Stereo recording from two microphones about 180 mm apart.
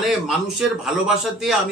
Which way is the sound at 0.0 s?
5° right (ahead or behind).